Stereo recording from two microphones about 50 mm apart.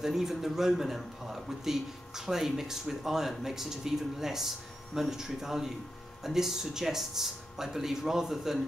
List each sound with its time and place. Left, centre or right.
0.0 s speech: centre